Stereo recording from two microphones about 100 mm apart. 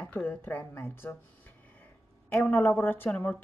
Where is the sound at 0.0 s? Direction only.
15° left (ahead or behind).